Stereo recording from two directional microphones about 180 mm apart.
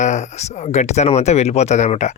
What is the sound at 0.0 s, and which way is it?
Speech, 40° left (ahead or behind).